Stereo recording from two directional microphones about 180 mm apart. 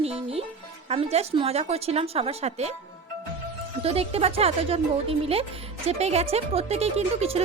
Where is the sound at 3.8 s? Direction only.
35° right (ahead or behind).